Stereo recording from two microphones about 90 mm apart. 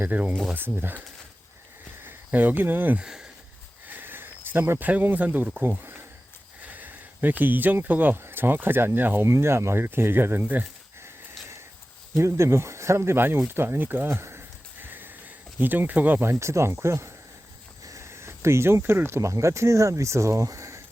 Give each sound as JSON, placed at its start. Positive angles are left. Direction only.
{"t": 0.1, "sound": "speech", "side_deg": -20}
{"t": 2.0, "sound": "speech", "side_deg": -20}
{"t": 3.8, "sound": "a sound", "side_deg": -20}
{"t": 6.6, "sound": "speech", "side_deg": -20}